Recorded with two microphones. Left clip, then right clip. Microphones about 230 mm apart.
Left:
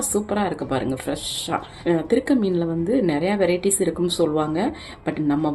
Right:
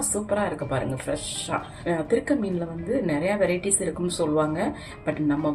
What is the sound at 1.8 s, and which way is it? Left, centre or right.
Speech, left.